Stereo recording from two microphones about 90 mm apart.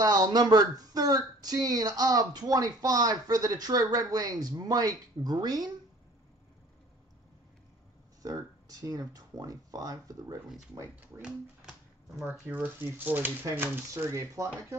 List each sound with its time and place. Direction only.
0.0 s speech: 50° right (ahead or behind)
8.2 s speech: 45° right (ahead or behind)
11.0 s speech: 10° right (ahead or behind)
12.4 s speech: 20° right (ahead or behind)